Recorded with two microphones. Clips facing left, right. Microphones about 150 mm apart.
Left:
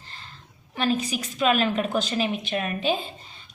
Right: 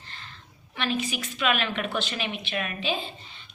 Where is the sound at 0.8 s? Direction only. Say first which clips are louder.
Left 4 dB; 40° left (ahead or behind).